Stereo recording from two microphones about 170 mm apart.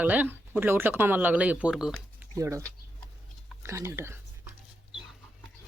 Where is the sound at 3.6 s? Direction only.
15° right (ahead or behind).